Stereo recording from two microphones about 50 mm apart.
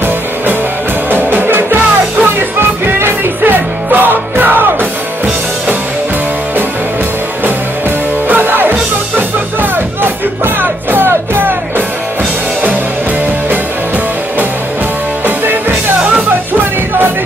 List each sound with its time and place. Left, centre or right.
1.1 s music: right
2.9 s music: right
8.3 s music: right